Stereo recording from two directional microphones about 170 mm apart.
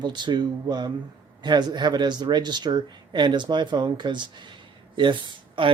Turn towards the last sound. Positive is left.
turn(degrees=-30)  # may be behind; listen again after turning